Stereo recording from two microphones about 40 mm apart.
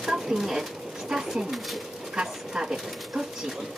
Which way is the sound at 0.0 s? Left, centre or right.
Centre.